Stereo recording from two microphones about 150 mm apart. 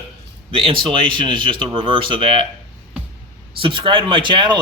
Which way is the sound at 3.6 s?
35° right (ahead or behind).